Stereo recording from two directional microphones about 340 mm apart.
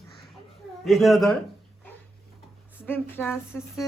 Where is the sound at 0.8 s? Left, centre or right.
Centre.